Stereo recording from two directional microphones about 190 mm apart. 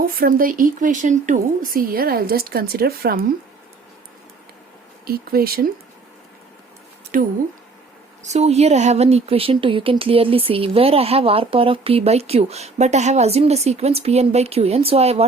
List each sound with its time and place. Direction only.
0.0 s speech: 50° right (ahead or behind)
5.0 s speech: 50° right (ahead or behind)
7.1 s speech: 45° right (ahead or behind)